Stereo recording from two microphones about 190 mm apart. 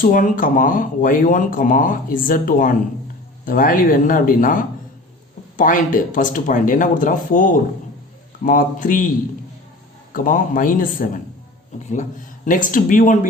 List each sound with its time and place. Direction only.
0.0 s speech: 45° left (ahead or behind)
10.2 s speech: 45° left (ahead or behind)